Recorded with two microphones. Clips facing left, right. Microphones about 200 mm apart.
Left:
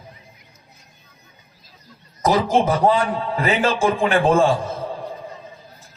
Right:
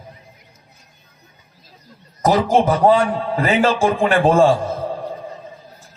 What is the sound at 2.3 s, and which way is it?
Speech, 45° right (ahead or behind).